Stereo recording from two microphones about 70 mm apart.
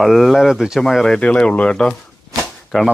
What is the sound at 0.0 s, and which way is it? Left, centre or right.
Speech, centre.